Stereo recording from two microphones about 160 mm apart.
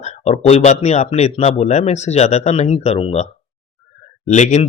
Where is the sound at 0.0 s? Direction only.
45° left (ahead or behind).